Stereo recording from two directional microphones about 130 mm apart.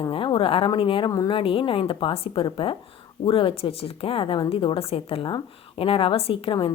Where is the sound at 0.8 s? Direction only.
45° left (ahead or behind).